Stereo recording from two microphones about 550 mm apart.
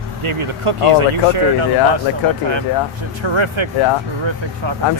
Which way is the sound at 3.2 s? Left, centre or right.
Right.